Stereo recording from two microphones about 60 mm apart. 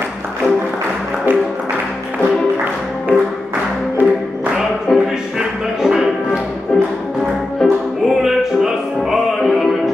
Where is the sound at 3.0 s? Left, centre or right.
Right.